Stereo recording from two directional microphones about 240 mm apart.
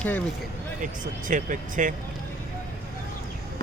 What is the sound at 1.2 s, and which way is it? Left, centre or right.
Speech, right.